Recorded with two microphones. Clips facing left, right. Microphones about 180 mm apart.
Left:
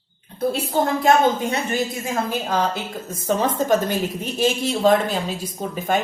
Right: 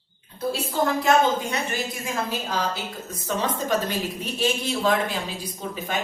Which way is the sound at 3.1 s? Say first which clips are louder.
Left 6 dB; 45° left (ahead or behind).